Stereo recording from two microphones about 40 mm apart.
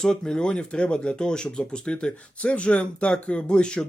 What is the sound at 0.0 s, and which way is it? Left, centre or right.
Speech, centre.